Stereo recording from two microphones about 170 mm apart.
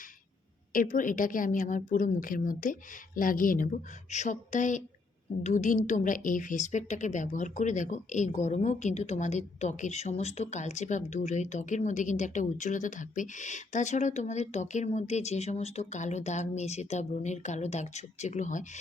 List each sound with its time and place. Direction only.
0.7 s a woman's voice: 50° left (ahead or behind)